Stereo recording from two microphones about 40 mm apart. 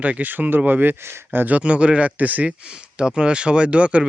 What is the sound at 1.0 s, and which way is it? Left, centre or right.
Speech, right.